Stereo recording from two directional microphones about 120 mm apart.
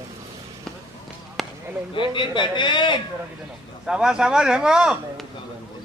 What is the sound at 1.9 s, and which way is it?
A man's voice, 40° left (ahead or behind).